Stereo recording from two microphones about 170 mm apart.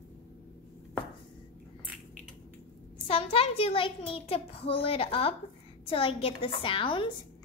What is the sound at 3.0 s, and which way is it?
A child's voice, 35° left (ahead or behind).